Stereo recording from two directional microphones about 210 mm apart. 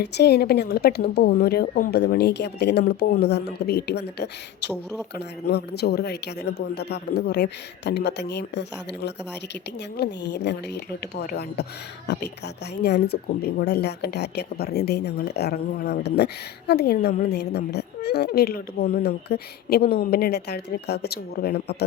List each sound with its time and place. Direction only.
0.0 s speech: 50° left (ahead or behind)